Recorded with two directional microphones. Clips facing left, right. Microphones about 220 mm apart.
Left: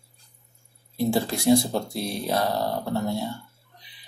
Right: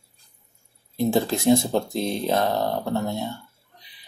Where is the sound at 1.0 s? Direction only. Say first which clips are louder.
Right 2 dB; 20° right (ahead or behind).